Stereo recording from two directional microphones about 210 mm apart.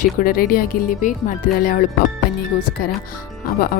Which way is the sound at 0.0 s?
40° left (ahead or behind).